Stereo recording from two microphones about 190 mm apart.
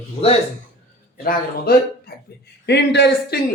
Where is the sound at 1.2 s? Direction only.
55° left (ahead or behind).